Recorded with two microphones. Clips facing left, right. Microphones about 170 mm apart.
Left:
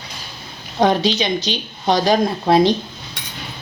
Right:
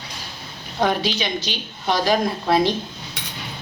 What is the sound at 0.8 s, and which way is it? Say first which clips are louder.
Speech: left 5 dB; 35° left (ahead or behind).